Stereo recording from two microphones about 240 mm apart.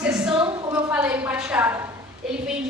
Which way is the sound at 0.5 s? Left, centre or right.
Right.